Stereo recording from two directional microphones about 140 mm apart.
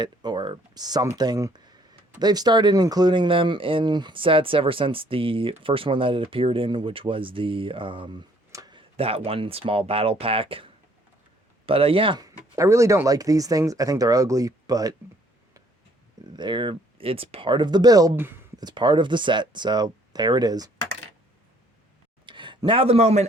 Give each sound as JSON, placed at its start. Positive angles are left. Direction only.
{"t": 0.0, "sound": "speech", "side_deg": -30}
{"t": 8.5, "sound": "a sound", "side_deg": -30}
{"t": 9.0, "sound": "speech", "side_deg": -45}
{"t": 12.2, "sound": "speech", "side_deg": -20}
{"t": 16.3, "sound": "speech", "side_deg": -35}
{"t": 22.3, "sound": "speech", "side_deg": -35}